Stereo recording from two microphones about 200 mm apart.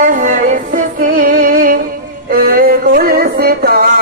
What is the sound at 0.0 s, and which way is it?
Music, 40° right (ahead or behind).